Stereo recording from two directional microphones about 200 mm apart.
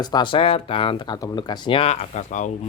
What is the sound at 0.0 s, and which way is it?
Speech, 20° left (ahead or behind).